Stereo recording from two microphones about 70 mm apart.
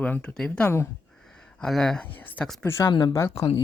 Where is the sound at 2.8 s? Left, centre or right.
Left.